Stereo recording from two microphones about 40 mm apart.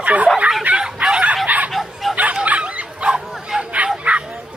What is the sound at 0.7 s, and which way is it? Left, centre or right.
Bow-wow, right.